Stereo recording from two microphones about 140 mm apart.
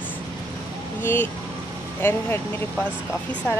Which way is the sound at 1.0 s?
15° left (ahead or behind).